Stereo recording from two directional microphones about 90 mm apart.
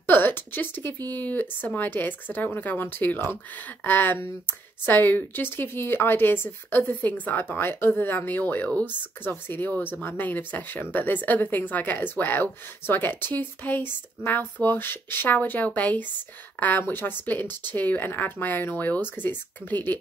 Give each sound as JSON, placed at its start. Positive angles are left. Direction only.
{"t": 0.0, "sound": "speech", "side_deg": 25}